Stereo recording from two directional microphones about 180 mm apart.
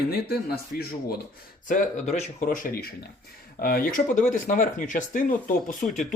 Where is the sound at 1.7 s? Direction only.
40° left (ahead or behind).